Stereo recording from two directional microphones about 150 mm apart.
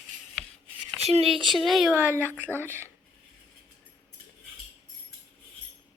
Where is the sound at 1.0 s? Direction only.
40° right (ahead or behind).